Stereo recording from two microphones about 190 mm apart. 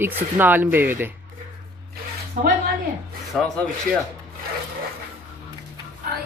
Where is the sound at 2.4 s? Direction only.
45° right (ahead or behind).